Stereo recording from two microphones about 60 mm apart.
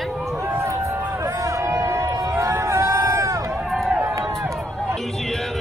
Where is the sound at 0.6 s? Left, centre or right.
Right.